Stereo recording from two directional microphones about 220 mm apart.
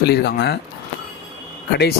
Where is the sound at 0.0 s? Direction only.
45° left (ahead or behind).